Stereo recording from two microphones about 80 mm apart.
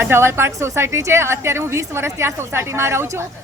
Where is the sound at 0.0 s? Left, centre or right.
Right.